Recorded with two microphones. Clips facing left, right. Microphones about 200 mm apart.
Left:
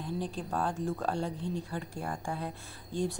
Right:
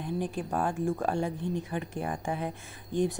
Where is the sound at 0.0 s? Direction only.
15° right (ahead or behind).